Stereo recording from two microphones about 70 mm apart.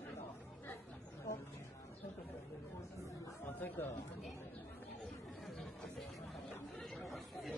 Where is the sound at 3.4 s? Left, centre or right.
Left.